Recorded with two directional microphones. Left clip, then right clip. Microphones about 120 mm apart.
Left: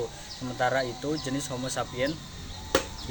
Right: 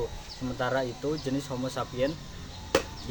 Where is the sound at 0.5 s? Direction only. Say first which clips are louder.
Left 3 dB; 30° right (ahead or behind).